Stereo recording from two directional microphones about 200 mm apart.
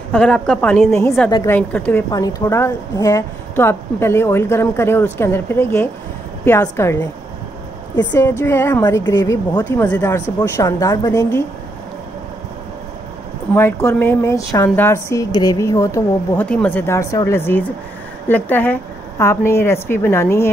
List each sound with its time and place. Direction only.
0.1 s a woman's voice: 5° left (ahead or behind)
8.1 s a woman's voice: 10° left (ahead or behind)
13.6 s a woman's voice: 10° left (ahead or behind)